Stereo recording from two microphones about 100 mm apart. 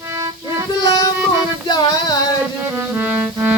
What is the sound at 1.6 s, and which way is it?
Music, 40° left (ahead or behind).